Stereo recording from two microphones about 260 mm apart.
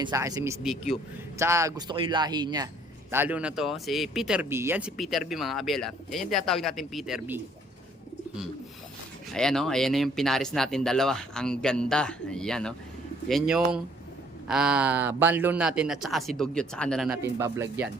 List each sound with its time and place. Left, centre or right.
0.0 s a man's voice: centre
9.3 s speech: centre
17.2 s a man's voice: centre